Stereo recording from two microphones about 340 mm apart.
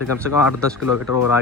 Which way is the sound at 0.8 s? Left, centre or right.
Left.